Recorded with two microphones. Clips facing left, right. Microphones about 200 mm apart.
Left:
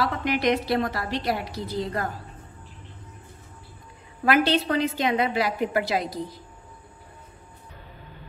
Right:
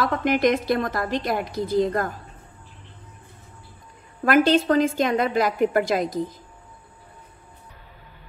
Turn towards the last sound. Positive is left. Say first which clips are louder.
# right 4 dB
turn(degrees=-45)  # may be behind; listen again after turning